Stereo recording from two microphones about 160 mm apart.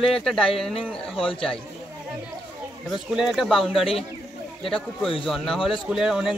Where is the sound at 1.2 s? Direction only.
35° left (ahead or behind).